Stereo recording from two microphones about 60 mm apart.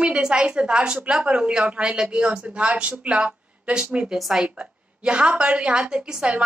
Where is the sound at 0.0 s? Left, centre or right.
Centre.